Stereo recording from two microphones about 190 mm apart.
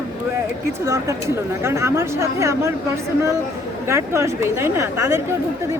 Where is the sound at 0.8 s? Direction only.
15° right (ahead or behind).